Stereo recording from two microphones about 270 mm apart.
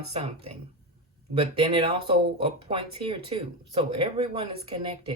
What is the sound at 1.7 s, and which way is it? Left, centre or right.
Speech, centre.